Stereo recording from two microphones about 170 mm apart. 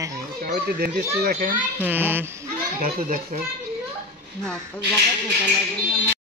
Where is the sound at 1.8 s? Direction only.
10° right (ahead or behind).